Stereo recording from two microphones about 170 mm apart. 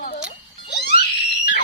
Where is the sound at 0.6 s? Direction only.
80° left.